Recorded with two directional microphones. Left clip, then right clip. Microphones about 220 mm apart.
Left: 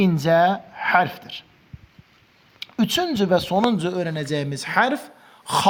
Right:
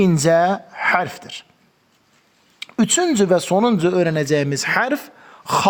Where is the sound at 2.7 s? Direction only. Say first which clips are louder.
Right 4 dB; 35° right (ahead or behind).